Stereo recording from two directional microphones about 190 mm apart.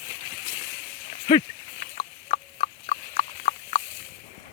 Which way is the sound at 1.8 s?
40° left (ahead or behind).